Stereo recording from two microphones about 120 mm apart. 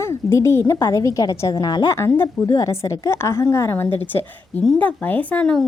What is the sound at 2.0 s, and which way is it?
A woman's voice, 20° left (ahead or behind).